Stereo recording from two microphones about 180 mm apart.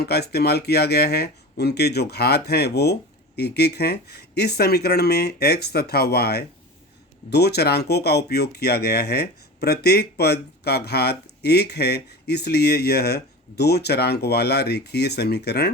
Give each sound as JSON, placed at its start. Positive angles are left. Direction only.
{"t": 0.0, "sound": "speech", "side_deg": 65}